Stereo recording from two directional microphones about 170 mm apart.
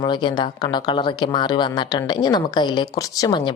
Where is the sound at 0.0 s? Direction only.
25° left (ahead or behind).